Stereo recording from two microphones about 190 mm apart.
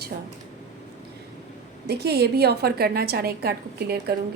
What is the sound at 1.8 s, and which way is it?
A woman's voice, 60° right (ahead or behind).